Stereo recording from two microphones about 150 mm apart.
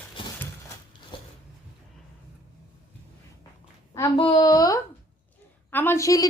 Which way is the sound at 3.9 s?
20° left (ahead or behind).